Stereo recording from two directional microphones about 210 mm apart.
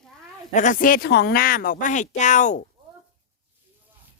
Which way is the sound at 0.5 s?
40° left (ahead or behind).